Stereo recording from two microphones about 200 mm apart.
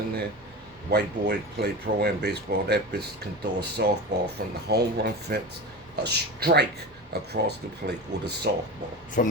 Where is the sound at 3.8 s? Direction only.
55° right (ahead or behind).